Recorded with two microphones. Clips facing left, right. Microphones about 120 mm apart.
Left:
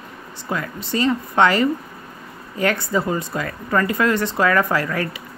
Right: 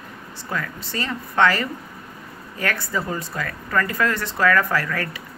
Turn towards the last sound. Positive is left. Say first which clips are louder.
# left 3 dB
turn(degrees=20)  # may be behind; listen again after turning